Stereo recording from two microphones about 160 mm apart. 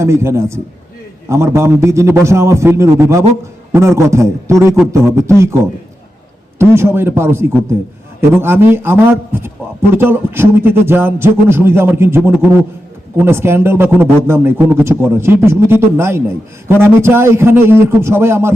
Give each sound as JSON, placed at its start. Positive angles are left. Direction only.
{"t": 0.0, "sound": "a man's voice", "side_deg": -15}
{"t": 6.6, "sound": "a man's voice", "side_deg": -15}